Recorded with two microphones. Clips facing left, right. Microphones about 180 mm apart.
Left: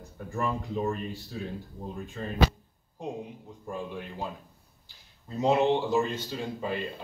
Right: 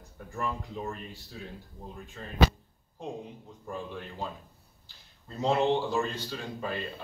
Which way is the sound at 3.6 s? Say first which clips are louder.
Left 2 dB; 15° left (ahead or behind).